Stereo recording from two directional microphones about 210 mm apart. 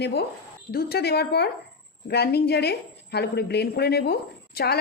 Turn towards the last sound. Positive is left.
turn(degrees=50)  # may be behind; listen again after turning